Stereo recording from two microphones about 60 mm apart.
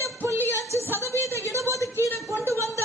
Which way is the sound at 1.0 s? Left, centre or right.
Right.